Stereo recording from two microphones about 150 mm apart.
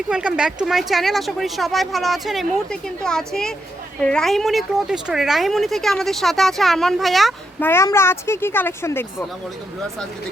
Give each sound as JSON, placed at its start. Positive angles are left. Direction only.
{"t": 0.1, "sound": "speech", "side_deg": -5}
{"t": 7.6, "sound": "speech", "side_deg": 15}